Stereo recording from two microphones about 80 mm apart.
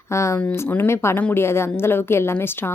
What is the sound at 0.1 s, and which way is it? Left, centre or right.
A woman's voice, left.